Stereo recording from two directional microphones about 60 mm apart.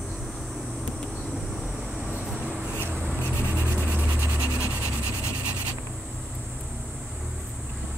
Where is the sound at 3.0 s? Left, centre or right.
Right.